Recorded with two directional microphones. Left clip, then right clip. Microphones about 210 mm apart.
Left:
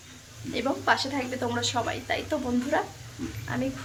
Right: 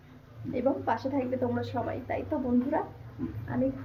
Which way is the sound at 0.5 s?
Centre (ahead or behind).